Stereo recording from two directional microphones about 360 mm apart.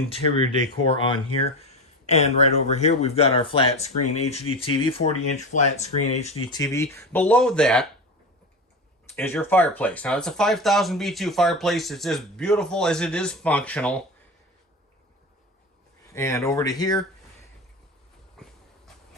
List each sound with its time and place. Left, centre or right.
0.9 s speech: centre
9.1 s speech: centre
16.1 s speech: centre
18.4 s a sound: centre